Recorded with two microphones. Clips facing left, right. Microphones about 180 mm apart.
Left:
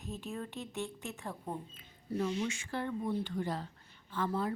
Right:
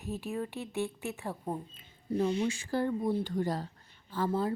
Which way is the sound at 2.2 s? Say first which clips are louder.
Right 5 dB; 35° right (ahead or behind).